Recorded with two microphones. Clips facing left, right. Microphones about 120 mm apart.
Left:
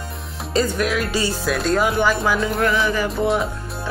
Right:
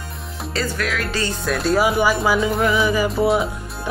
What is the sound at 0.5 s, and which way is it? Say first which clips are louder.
Speech: left 4 dB; 20° left (ahead or behind).